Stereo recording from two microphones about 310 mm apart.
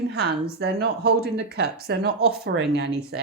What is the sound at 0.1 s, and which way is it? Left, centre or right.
A woman's voice, right.